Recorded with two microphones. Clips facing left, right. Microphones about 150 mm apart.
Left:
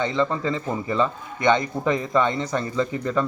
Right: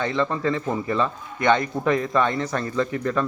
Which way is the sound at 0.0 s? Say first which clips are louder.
Even; 15° left (ahead or behind).